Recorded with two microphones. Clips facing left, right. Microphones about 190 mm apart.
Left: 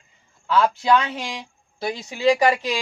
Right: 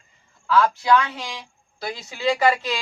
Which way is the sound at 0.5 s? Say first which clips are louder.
Even; 20° left (ahead or behind).